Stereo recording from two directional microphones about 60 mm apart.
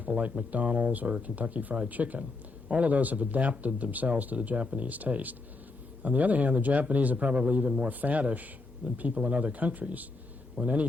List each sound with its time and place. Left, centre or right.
0.0 s speech: right